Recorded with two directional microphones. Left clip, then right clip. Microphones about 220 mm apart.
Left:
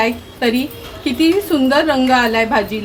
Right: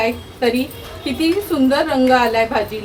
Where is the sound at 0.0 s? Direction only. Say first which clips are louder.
Left 1 dB; 40° left (ahead or behind).